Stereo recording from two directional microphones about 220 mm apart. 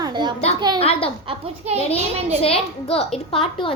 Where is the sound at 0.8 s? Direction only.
25° left (ahead or behind).